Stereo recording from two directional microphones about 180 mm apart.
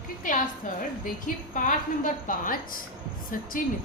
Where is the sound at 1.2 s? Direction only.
50° left (ahead or behind).